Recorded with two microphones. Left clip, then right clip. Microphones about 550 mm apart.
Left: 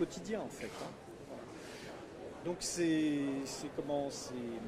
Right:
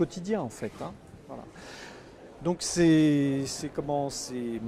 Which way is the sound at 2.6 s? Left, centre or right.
Right.